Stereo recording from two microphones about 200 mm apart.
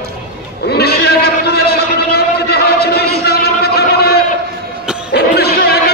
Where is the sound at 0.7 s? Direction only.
50° left (ahead or behind).